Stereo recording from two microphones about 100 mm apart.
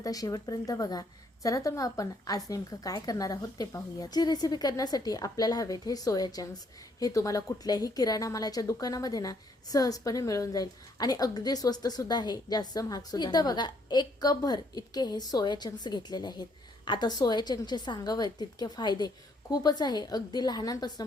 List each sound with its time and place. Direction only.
0.0 s a woman's voice: 35° left (ahead or behind)